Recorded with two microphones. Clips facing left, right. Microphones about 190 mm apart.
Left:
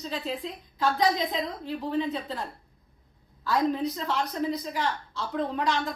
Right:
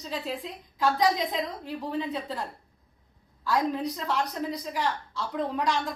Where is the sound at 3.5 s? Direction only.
10° right (ahead or behind).